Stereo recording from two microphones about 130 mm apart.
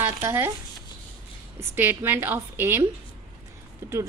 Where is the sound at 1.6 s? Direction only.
15° right (ahead or behind).